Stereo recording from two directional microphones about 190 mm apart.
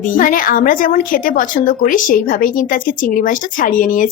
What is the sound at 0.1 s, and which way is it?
A woman's voice, 45° left (ahead or behind).